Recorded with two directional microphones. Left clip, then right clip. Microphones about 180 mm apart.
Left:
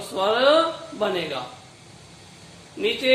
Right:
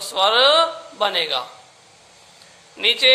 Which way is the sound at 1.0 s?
40° right (ahead or behind).